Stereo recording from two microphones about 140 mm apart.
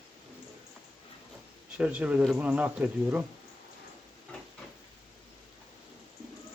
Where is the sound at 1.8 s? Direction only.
10° right (ahead or behind).